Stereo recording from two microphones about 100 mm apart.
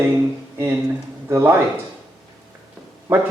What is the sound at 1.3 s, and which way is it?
Speech, 25° right (ahead or behind).